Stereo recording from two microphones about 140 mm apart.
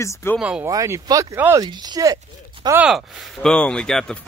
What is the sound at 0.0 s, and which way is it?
Speech, 20° left (ahead or behind).